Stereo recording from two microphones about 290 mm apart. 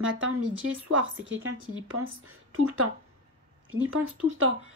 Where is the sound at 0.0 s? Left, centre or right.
Right.